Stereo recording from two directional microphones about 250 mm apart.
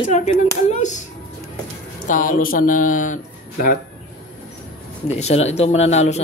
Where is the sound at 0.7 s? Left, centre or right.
Left.